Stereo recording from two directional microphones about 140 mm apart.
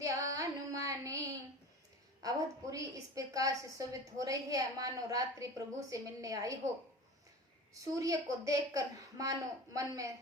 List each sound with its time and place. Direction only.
0.0 s music: 25° right (ahead or behind)
2.2 s a woman's voice: 25° right (ahead or behind)
7.7 s a woman's voice: 25° right (ahead or behind)